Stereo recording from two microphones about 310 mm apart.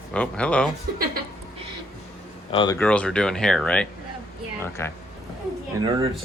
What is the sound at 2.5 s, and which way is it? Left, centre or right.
Speech, centre.